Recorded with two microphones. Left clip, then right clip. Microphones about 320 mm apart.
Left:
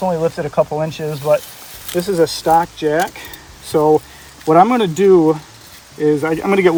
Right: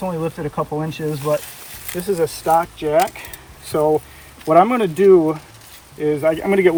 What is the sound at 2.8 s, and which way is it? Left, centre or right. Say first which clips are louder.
Speech: even; centre.